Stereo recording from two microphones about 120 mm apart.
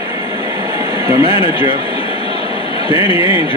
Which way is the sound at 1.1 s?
25° right (ahead or behind).